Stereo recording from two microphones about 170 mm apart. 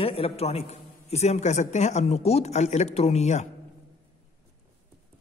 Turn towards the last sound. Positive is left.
turn(degrees=40)  # may be behind; listen again after turning